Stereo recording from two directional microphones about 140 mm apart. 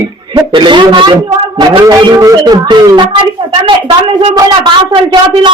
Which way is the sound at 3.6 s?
40° right (ahead or behind).